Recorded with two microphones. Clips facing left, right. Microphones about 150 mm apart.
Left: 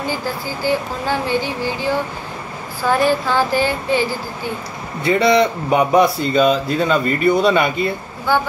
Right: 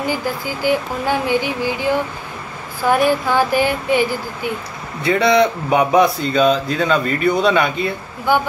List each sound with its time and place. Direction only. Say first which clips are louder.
0.0 s music: right 2 dB; 15° right (ahead or behind)
3.1 s music: right 1 dB; 20° right (ahead or behind)
5.0 s speech: even; centre (ahead or behind)